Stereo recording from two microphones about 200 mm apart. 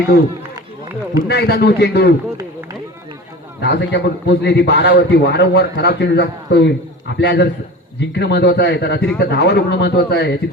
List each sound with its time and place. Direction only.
1.3 s a man's voice: 55° left (ahead or behind)
3.6 s a man's voice: 60° left (ahead or behind)